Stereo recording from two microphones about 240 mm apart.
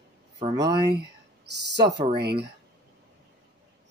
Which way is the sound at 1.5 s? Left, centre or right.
Right.